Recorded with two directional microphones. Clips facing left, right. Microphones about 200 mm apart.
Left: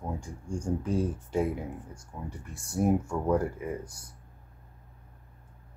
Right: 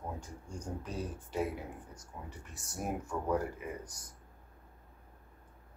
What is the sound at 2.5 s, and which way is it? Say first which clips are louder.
Speech: left 12 dB; 10° left (ahead or behind).